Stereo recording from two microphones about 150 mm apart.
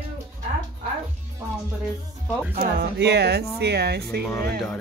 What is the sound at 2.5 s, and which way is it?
Speech, 90° right.